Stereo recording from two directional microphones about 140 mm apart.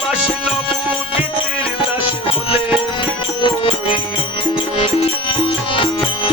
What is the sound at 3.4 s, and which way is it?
Music, 40° left (ahead or behind).